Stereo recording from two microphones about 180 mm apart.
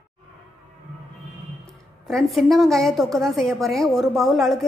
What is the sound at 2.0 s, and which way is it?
A woman's voice, centre (ahead or behind).